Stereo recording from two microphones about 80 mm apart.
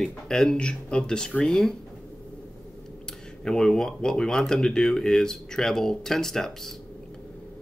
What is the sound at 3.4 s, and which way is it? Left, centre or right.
Speech, centre.